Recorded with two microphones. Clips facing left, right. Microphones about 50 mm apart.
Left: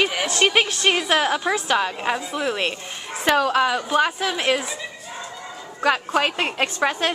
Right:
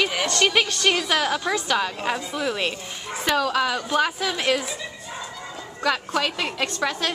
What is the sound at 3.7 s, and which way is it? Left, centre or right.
Speech, centre.